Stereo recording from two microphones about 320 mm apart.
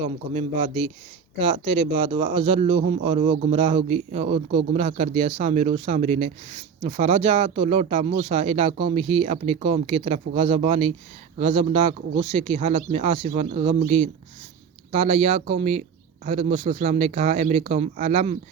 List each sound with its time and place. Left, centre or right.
0.0 s a man's voice: centre